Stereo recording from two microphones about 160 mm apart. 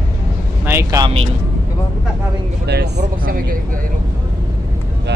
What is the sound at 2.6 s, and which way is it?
Speech, 90° right.